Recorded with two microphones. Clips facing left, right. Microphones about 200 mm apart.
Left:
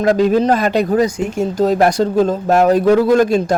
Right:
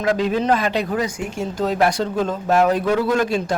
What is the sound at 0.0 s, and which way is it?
Speech, 45° left (ahead or behind).